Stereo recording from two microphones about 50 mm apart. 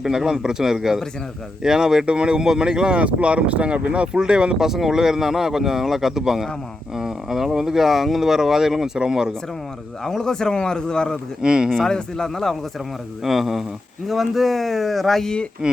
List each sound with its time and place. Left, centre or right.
0.0 s speech: centre
4.7 s speech: centre
10.0 s speech: centre
11.4 s speech: centre
11.9 s speech: centre
13.2 s speech: centre
15.6 s speech: centre